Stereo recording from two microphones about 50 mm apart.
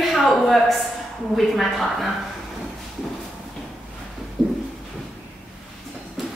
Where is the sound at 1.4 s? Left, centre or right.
Centre.